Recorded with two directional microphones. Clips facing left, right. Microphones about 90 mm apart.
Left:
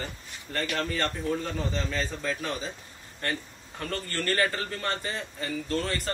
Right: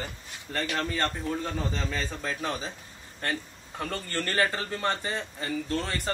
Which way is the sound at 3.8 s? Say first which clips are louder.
Even; 15° right (ahead or behind).